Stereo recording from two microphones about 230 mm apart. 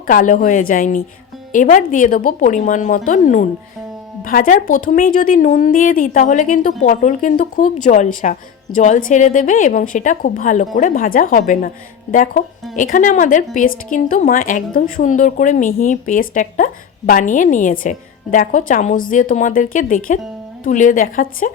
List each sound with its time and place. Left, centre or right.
0.1 s speech: left